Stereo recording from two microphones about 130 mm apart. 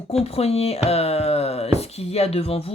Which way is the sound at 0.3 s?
50° left (ahead or behind).